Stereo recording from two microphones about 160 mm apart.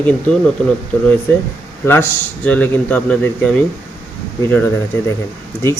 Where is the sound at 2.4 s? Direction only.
10° left (ahead or behind).